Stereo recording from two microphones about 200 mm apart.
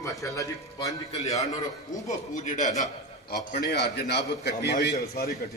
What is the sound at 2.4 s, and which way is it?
Speech, 40° left (ahead or behind).